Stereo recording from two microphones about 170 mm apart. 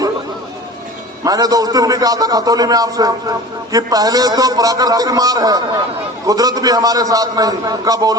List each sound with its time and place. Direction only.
1.2 s a man's voice: 20° right (ahead or behind)